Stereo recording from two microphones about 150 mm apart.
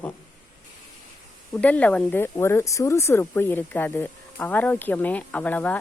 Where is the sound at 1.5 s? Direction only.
10° left (ahead or behind).